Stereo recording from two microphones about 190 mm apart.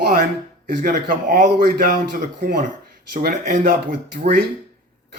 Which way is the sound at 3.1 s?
45° right (ahead or behind).